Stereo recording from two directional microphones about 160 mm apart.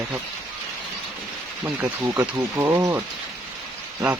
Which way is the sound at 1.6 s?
15° right (ahead or behind).